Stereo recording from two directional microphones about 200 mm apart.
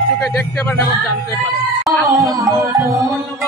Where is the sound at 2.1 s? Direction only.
15° right (ahead or behind).